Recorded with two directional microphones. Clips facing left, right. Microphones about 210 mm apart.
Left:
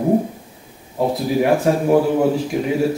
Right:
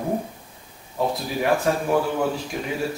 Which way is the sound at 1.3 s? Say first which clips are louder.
Left 7 dB; 10° left (ahead or behind).